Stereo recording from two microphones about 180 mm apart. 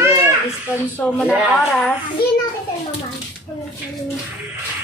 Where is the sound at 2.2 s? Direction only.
60° left (ahead or behind).